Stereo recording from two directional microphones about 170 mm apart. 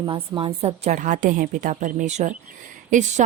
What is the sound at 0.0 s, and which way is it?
Speech, 30° right (ahead or behind).